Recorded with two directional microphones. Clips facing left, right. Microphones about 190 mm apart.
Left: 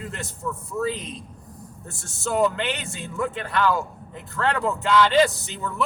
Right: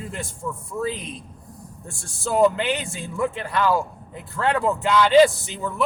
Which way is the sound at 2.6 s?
15° right (ahead or behind).